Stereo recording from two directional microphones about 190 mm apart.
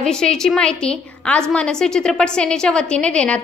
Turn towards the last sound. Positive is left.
turn(degrees=5)  # may be behind; listen again after turning